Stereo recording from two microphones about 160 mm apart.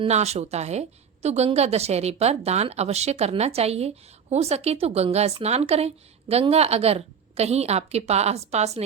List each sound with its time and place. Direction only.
0.0 s a woman's voice: 40° right (ahead or behind)